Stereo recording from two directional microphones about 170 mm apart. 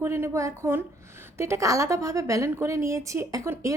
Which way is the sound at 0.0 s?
15° right (ahead or behind).